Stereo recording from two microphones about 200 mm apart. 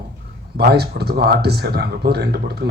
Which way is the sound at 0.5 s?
55° right (ahead or behind).